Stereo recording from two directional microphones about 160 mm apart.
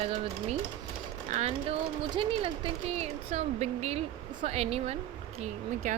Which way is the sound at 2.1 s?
35° right (ahead or behind).